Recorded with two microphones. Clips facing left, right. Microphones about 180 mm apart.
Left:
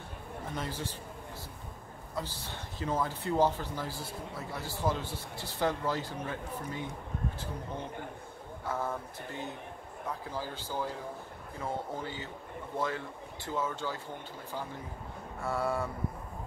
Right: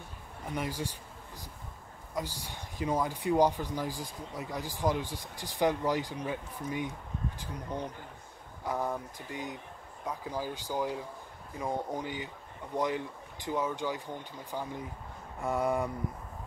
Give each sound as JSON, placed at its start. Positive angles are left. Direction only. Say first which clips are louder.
{"t": 0.5, "sound": "speech", "louder": "right 3 dB", "side_deg": -10}
{"t": 2.1, "sound": "speech", "louder": "right 2 dB", "side_deg": -15}